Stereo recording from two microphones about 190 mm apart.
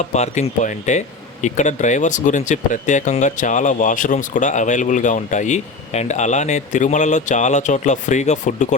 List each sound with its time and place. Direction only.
0.0 s speech: 35° left (ahead or behind)